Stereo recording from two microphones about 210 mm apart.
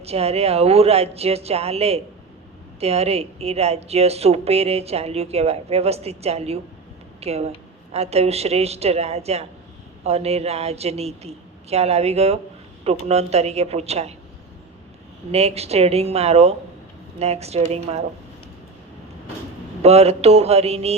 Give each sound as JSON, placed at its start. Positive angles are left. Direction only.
{"t": 0.0, "sound": "speech", "side_deg": -30}
{"t": 15.3, "sound": "speech", "side_deg": -30}
{"t": 19.8, "sound": "speech", "side_deg": -30}